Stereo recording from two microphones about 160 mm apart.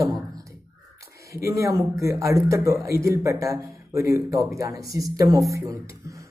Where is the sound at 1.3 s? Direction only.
20° right (ahead or behind).